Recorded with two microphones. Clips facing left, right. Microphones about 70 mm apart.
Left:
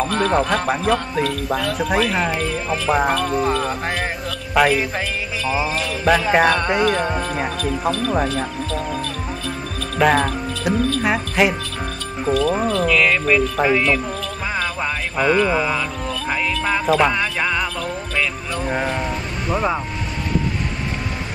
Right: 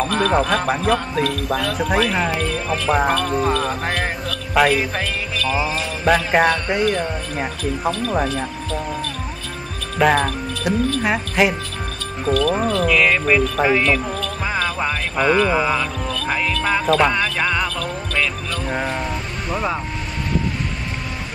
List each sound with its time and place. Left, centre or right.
0.0 s speech: centre
5.4 s music: centre
6.0 s speech: centre
9.9 s speech: centre
16.1 s music: centre
18.7 s speech: centre